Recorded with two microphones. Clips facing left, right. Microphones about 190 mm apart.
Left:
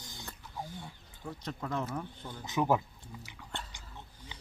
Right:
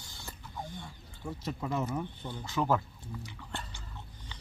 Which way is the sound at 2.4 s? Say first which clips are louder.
Left 1 dB; 15° left (ahead or behind).